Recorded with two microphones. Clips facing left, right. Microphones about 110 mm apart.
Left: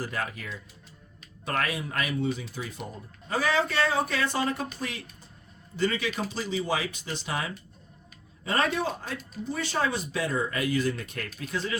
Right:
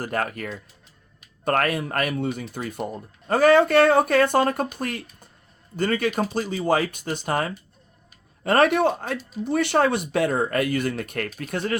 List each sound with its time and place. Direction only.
0.0 s speech: 55° right (ahead or behind)
8.4 s speech: 65° right (ahead or behind)